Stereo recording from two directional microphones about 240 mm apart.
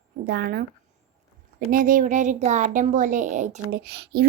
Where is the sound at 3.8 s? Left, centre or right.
Right.